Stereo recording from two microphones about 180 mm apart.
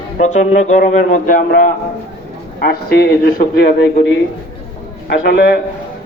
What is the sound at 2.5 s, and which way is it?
A man's voice, 55° left (ahead or behind).